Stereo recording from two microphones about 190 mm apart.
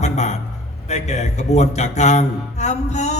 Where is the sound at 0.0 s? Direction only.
35° left (ahead or behind).